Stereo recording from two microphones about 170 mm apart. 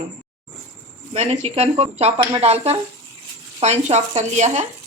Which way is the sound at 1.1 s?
40° right (ahead or behind).